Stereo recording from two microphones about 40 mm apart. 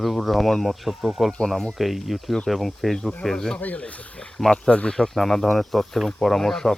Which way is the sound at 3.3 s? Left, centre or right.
Centre.